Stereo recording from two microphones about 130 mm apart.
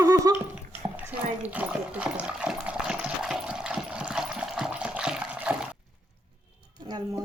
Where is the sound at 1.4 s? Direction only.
10° right (ahead or behind).